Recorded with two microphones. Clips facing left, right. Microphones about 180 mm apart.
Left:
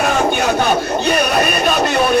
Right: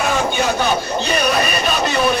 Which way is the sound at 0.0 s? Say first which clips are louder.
Left 3 dB; 55° left (ahead or behind).